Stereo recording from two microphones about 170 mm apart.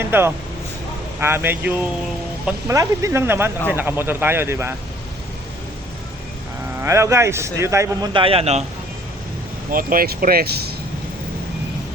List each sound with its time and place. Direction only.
0.0 s a man's voice: 15° right (ahead or behind)
6.7 s a man's voice: 15° right (ahead or behind)
8.1 s a man's voice: 35° right (ahead or behind)
9.7 s speech: 55° right (ahead or behind)